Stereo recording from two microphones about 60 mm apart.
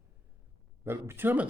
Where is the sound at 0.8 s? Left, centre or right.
Right.